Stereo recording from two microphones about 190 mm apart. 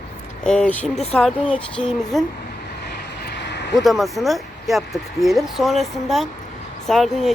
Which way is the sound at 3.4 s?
65° left (ahead or behind).